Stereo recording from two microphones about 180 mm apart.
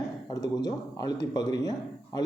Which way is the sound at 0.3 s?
20° left (ahead or behind).